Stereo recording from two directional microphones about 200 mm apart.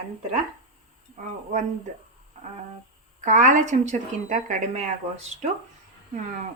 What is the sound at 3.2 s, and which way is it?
Speech, 40° right (ahead or behind).